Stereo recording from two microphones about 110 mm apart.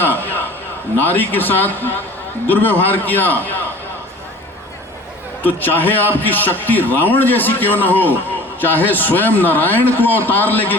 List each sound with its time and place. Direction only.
0.0 s a sound: 15° left (ahead or behind)
1.0 s a man's voice: 15° left (ahead or behind)
5.4 s a man's voice: 20° left (ahead or behind)